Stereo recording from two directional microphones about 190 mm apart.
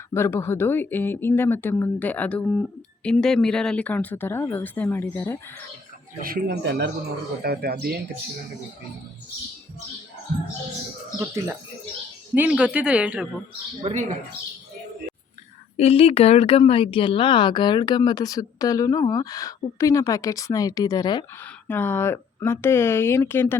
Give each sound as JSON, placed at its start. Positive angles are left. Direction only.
{"t": 0.1, "sound": "speech", "side_deg": 10}
{"t": 6.2, "sound": "speech", "side_deg": -55}
{"t": 11.2, "sound": "speech", "side_deg": -10}
{"t": 13.8, "sound": "speech", "side_deg": -40}
{"t": 15.8, "sound": "speech", "side_deg": 30}
{"t": 21.7, "sound": "speech", "side_deg": 10}